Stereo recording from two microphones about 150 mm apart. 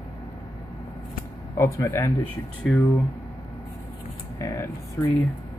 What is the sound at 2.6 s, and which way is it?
Speech, 5° left (ahead or behind).